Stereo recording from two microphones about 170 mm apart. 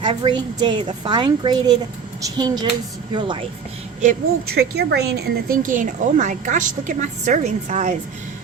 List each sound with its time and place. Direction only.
0.0 s a woman's voice: 30° right (ahead or behind)
4.5 s a woman's voice: 75° right (ahead or behind); by 7.9 s 45° right (ahead or behind)